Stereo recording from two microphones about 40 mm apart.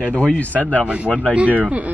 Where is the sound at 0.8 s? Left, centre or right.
Right.